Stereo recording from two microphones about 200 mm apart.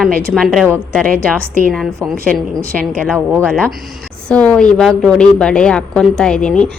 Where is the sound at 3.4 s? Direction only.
5° left (ahead or behind).